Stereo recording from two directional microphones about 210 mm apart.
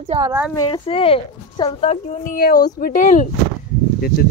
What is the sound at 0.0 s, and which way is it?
Speech, 30° right (ahead or behind).